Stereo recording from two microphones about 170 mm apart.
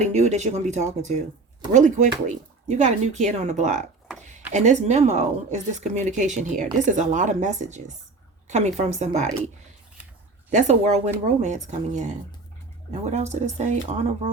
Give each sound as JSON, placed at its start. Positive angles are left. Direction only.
{"t": 0.0, "sound": "speech", "side_deg": -40}
{"t": 10.5, "sound": "speech", "side_deg": -40}